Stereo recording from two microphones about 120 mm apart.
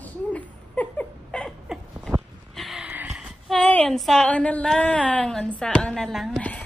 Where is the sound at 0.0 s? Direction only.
15° left (ahead or behind).